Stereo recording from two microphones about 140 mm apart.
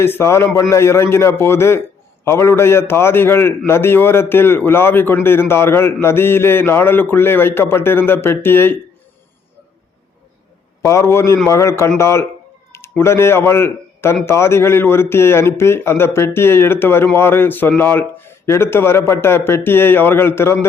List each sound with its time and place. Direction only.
0.0 s a man's voice: 20° left (ahead or behind)
10.8 s a man's voice: 20° left (ahead or behind)